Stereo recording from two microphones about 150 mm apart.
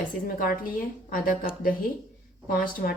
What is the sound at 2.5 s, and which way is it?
Speech, 70° left (ahead or behind).